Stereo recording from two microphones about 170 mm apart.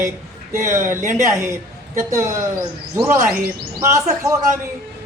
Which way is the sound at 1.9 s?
15° right (ahead or behind).